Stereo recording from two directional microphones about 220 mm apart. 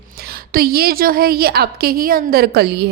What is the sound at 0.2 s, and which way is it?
A woman's voice, 45° right (ahead or behind).